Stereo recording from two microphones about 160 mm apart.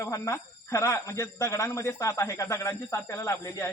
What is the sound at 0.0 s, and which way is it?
Speech, 20° left (ahead or behind).